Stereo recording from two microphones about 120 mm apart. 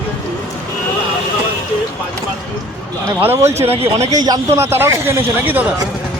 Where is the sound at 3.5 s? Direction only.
60° right (ahead or behind).